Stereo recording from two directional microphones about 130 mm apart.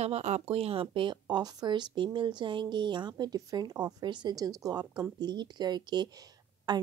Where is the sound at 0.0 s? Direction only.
55° right (ahead or behind).